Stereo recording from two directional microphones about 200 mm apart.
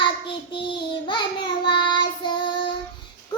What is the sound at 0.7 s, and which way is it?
Child singing, 25° left (ahead or behind).